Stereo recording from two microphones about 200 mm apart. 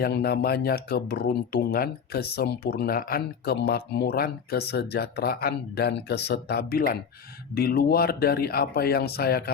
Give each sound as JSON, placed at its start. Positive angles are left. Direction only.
{"t": 0.0, "sound": "speech", "side_deg": 50}